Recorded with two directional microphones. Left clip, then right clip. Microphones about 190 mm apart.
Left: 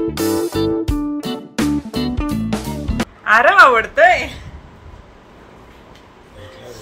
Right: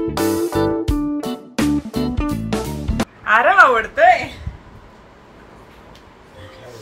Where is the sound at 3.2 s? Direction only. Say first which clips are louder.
Left 2 dB; 20° left (ahead or behind).